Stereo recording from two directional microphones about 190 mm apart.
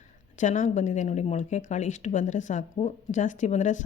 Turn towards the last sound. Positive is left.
turn(degrees=40)  # may be behind; listen again after turning